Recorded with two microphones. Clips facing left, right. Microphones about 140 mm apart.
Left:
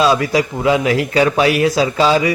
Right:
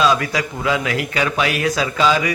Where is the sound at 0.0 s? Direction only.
30° left (ahead or behind).